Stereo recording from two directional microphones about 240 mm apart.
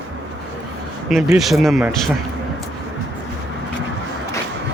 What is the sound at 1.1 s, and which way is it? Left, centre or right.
Speech, centre.